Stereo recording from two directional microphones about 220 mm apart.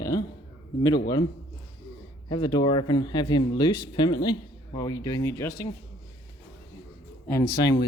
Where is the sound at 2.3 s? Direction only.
15° left (ahead or behind).